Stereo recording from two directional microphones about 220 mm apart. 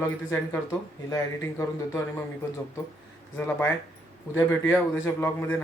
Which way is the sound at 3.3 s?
10° left (ahead or behind).